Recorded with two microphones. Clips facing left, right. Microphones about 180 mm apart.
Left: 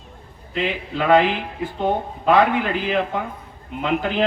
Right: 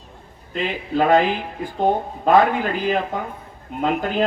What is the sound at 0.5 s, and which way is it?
Speech, 45° right (ahead or behind).